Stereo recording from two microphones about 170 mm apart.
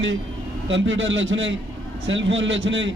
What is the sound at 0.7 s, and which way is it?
A man's voice, 90° right.